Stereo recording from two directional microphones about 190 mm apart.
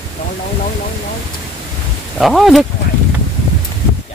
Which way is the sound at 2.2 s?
Centre (ahead or behind).